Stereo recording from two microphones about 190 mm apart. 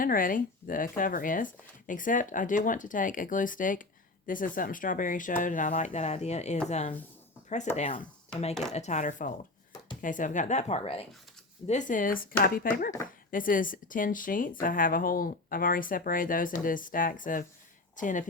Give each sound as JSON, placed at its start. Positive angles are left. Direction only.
{"t": 0.0, "sound": "speech", "side_deg": 45}